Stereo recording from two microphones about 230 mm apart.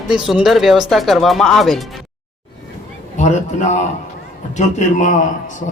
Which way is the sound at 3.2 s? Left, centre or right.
Left.